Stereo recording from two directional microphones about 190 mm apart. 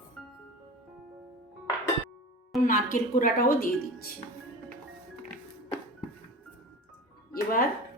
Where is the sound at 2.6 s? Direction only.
45° left (ahead or behind).